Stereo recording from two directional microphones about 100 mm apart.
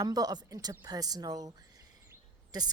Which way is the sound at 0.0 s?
40° right (ahead or behind).